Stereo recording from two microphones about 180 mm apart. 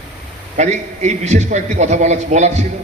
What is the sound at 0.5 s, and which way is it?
A man's voice, 40° right (ahead or behind).